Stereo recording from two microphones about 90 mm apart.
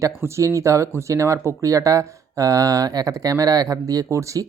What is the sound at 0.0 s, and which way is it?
Speech, 30° right (ahead or behind).